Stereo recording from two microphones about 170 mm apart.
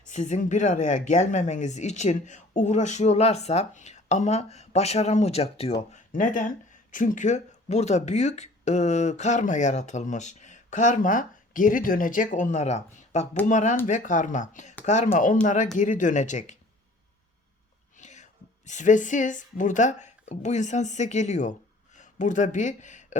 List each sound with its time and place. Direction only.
0.0 s speech: 45° left (ahead or behind)
5.9 s speech: 50° left (ahead or behind)
17.9 s a woman's voice: 45° left (ahead or behind)